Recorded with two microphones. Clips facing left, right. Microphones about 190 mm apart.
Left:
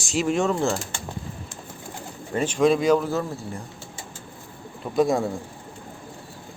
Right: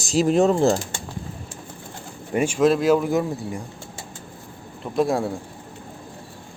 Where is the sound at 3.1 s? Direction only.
15° right (ahead or behind).